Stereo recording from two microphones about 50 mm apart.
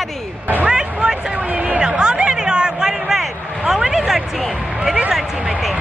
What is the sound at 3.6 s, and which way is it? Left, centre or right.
Speech, centre.